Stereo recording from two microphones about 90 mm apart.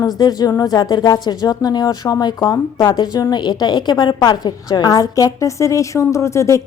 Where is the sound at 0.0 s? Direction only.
45° left (ahead or behind).